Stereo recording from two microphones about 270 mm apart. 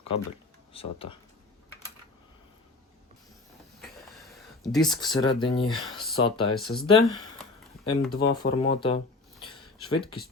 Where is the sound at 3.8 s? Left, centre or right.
Centre.